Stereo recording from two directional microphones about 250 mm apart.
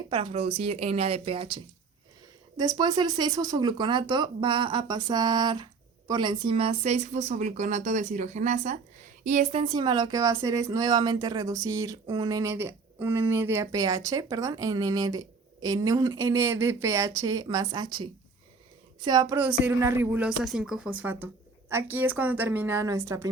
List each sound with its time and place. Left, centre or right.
0.1 s a woman's voice: right